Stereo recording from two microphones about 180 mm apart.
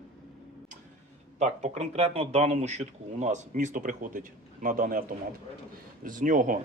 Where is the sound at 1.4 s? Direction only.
40° right (ahead or behind).